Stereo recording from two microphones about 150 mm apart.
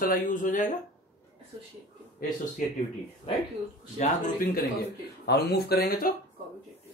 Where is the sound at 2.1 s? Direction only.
70° left (ahead or behind).